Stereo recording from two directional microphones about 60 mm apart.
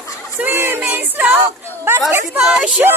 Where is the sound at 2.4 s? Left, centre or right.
Centre.